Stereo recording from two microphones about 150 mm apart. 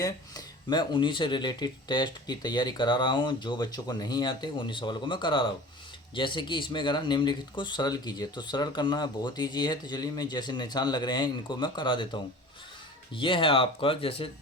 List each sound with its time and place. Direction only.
0.0 s speech: 25° left (ahead or behind)